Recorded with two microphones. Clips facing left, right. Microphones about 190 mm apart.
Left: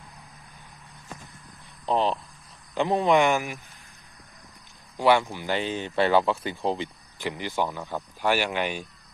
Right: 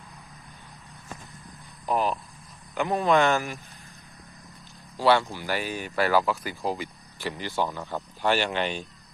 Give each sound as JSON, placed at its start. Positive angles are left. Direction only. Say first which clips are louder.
{"t": 1.9, "sound": "speech", "louder": "left 2 dB", "side_deg": 25}
{"t": 4.9, "sound": "speech", "louder": "left 1 dB", "side_deg": 15}